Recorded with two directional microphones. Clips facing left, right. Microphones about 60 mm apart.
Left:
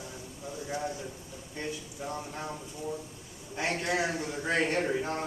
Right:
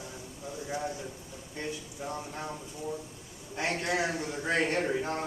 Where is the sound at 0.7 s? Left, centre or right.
Centre.